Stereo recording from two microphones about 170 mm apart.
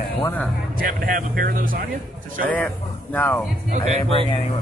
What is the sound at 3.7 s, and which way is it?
Speech, 40° right (ahead or behind).